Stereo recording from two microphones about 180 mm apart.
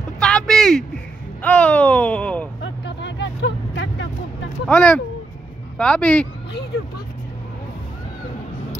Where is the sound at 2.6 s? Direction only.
75° left (ahead or behind).